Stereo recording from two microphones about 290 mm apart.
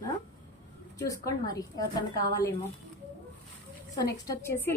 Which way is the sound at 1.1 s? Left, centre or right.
Centre.